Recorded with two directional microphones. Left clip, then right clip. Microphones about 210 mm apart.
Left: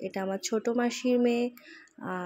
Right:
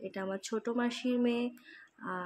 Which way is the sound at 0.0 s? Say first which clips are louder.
Left 6 dB; 15° left (ahead or behind).